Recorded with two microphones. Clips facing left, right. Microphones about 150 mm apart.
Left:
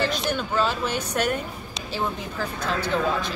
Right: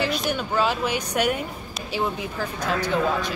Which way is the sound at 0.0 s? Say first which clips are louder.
Even; 10° right (ahead or behind).